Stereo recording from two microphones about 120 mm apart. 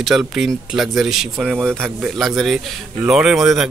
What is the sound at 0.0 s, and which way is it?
A man's voice, 5° right (ahead or behind).